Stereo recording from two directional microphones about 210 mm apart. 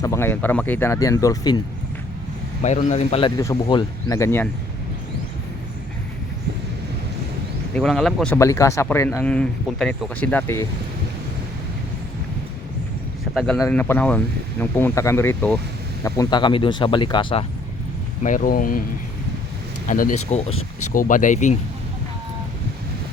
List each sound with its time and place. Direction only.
0.0 s speech: 15° left (ahead or behind)
2.6 s a man's voice: 35° left (ahead or behind); by 4.4 s 10° left (ahead or behind)
7.8 s speech: centre (ahead or behind)
8.4 s speech: 15° left (ahead or behind)
13.3 s a man's voice: centre (ahead or behind); by 17.4 s 25° left (ahead or behind)
18.2 s speech: 40° left (ahead or behind)
19.9 s speech: 40° left (ahead or behind)